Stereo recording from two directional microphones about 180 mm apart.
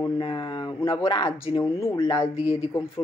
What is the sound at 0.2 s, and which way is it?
Speech, 25° left (ahead or behind).